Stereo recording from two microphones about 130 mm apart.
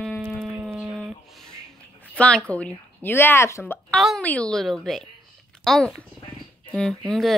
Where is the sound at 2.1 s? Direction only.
10° left (ahead or behind).